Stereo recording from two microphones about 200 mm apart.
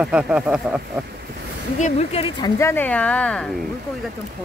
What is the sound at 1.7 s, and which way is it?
Speech, 35° left (ahead or behind).